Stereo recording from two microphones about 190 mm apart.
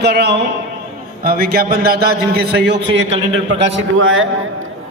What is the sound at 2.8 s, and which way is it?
Speech, 30° right (ahead or behind).